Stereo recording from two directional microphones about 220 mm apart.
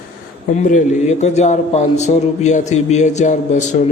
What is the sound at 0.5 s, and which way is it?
A man's voice, 35° left (ahead or behind).